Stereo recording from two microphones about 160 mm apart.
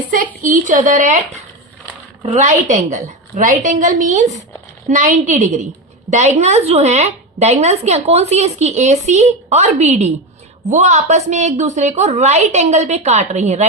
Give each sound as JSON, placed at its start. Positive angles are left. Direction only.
{"t": 0.4, "sound": "a woman's voice", "side_deg": -55}
{"t": 2.2, "sound": "a woman's voice", "side_deg": -45}